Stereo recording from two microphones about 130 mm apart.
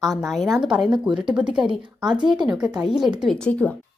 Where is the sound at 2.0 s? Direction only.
35° right (ahead or behind).